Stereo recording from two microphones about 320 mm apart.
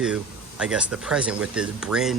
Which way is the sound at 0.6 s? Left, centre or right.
Centre.